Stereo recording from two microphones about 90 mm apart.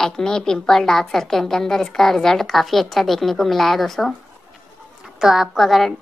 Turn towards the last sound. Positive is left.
turn(degrees=0)  # may be behind; listen again after turning